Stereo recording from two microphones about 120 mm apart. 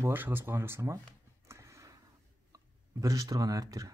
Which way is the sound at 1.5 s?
25° right (ahead or behind).